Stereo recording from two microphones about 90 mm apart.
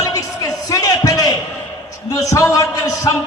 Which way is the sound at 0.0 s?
40° left (ahead or behind).